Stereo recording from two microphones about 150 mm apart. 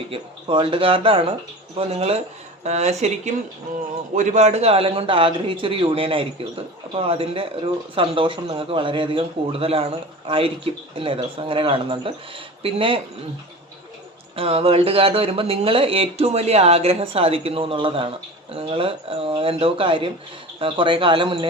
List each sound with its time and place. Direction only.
0.1 s a man's voice: 35° right (ahead or behind)
14.3 s a man's voice: 40° right (ahead or behind)